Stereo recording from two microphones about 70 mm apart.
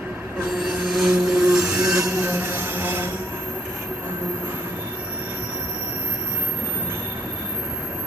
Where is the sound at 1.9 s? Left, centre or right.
Right.